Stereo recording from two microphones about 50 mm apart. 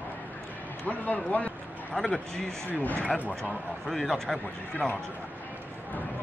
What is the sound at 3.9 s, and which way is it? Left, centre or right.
Speech, centre.